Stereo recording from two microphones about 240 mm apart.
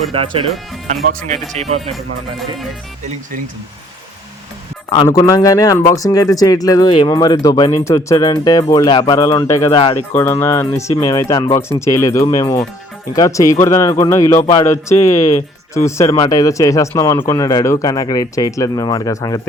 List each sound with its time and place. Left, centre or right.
0.1 s speech: right
4.9 s speech: centre